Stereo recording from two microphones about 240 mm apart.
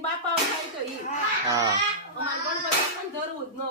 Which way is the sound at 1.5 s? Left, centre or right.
Centre.